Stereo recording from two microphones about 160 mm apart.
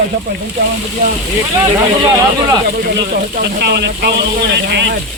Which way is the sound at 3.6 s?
90° right.